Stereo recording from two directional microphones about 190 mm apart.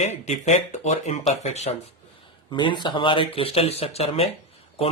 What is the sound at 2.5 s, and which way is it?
Speech, 25° left (ahead or behind).